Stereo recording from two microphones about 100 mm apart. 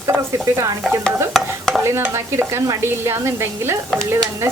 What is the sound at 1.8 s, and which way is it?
Speech, 25° right (ahead or behind).